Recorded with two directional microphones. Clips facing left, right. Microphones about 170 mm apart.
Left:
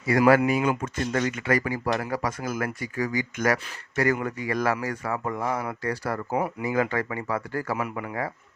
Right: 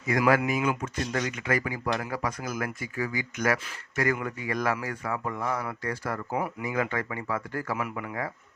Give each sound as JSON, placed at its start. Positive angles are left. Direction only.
{"t": 0.1, "sound": "speech", "side_deg": 35}